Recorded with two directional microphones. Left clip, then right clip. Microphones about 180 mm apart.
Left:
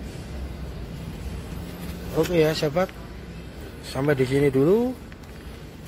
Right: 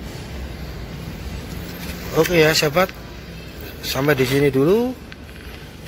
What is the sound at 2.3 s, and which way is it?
Speech, 5° left (ahead or behind).